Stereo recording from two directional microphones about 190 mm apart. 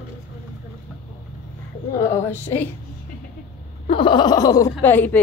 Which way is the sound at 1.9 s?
15° left (ahead or behind).